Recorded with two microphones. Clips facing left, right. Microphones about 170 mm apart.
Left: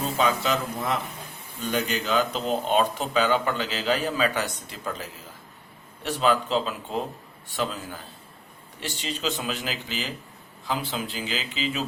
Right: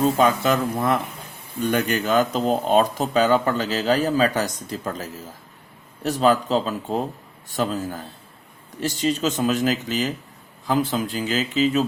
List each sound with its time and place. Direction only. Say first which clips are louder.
0.2 s speech: right 5 dB; 50° right (ahead or behind)